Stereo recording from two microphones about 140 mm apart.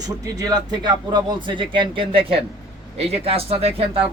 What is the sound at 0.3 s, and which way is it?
A man's voice, 30° right (ahead or behind).